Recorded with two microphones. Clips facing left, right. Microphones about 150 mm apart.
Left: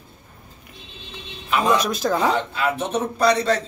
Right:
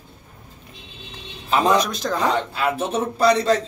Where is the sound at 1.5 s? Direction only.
35° right (ahead or behind).